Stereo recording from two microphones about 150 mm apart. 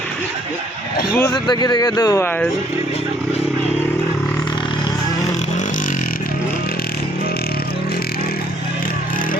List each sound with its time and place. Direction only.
1.3 s speech: 30° left (ahead or behind)